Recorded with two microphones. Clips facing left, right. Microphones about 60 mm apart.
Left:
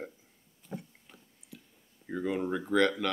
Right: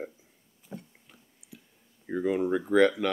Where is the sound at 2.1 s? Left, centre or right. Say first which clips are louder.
Right 5 dB; centre.